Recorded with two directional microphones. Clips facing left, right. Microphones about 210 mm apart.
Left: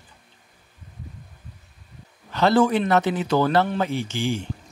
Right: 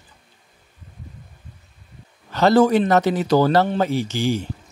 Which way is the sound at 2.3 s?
40° right (ahead or behind).